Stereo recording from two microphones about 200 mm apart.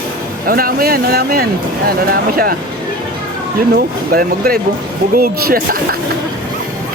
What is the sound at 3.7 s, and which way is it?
Speech, 50° right (ahead or behind).